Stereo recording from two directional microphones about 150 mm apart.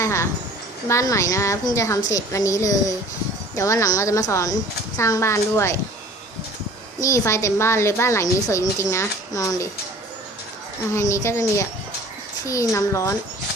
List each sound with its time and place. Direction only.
0.0 s a woman's voice: 20° left (ahead or behind)
7.0 s a woman's voice: 20° left (ahead or behind)
10.9 s a woman's voice: 20° left (ahead or behind)